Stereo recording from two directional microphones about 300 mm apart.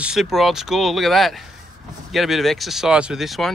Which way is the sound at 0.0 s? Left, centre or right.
Centre.